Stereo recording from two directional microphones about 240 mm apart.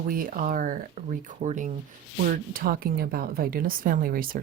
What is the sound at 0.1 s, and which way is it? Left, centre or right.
A woman's voice, right.